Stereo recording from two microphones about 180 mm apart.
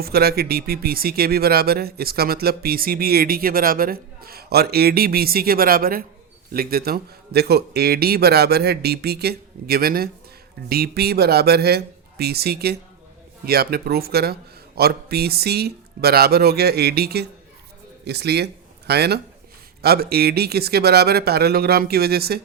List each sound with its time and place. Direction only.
0.0 s speech: 60° right (ahead or behind)